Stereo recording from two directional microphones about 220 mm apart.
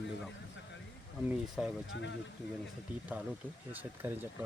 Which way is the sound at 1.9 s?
55° left (ahead or behind).